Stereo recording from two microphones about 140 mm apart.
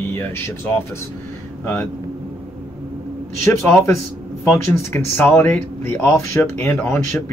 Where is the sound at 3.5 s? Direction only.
15° left (ahead or behind).